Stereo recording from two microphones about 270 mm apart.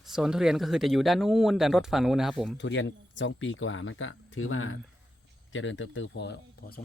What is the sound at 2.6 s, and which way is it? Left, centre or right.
Speech, left.